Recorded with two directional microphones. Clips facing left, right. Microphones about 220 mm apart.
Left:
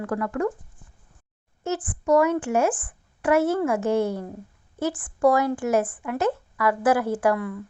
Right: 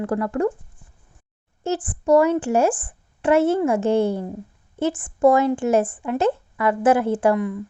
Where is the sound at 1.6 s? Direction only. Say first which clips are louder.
Right 3 dB; 30° right (ahead or behind).